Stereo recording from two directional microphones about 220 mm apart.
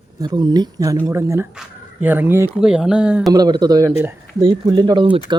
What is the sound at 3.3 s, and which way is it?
Speech, 20° right (ahead or behind).